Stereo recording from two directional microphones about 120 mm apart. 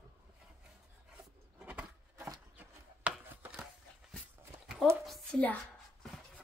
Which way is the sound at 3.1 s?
10° right (ahead or behind).